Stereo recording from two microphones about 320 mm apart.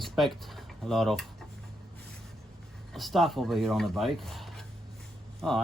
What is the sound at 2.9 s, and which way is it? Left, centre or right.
Speech, centre.